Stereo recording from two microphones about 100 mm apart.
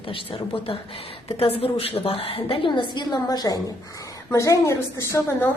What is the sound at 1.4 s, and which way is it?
A woman's voice, 80° left.